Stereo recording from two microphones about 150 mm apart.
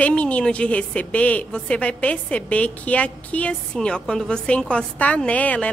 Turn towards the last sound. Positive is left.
turn(degrees=10)  # may be behind; listen again after turning